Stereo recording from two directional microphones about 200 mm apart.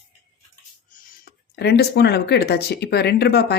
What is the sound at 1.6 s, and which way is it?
Speech, 55° left (ahead or behind).